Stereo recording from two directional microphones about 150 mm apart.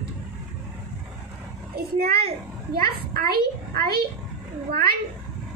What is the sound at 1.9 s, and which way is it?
A child's voice, 90° right.